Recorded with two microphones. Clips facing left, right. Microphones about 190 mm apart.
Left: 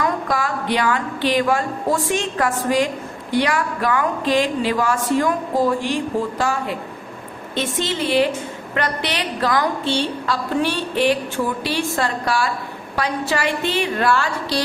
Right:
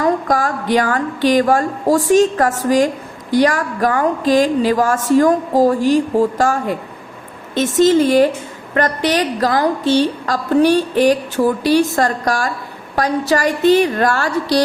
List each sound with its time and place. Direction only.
0.0 s a woman's voice: 45° right (ahead or behind)